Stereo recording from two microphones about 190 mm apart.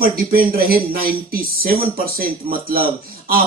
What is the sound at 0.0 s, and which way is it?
A man's voice, 50° right (ahead or behind).